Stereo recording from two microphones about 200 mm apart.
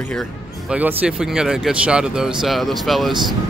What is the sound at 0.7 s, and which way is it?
Speech, 10° right (ahead or behind).